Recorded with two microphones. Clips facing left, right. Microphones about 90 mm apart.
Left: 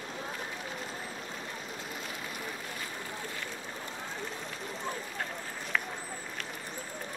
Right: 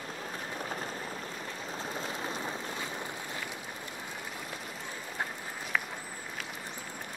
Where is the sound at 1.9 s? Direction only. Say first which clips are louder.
Right 4 dB; 30° right (ahead or behind).